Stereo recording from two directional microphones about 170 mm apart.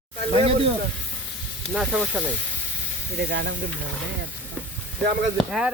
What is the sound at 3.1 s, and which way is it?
Speech, 85° right.